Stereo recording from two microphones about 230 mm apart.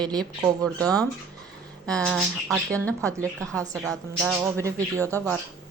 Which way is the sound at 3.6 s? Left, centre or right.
Centre.